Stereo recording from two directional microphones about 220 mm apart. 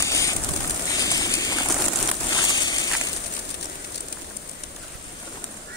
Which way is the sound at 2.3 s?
20° left (ahead or behind).